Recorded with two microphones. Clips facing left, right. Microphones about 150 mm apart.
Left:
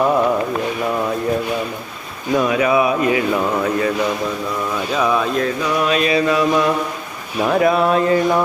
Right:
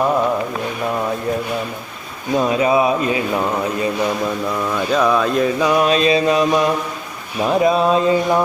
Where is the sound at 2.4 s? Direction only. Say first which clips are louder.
Right 1 dB; 25° right (ahead or behind).